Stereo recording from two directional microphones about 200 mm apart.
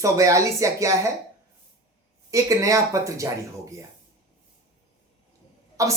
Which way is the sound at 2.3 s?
15° right (ahead or behind).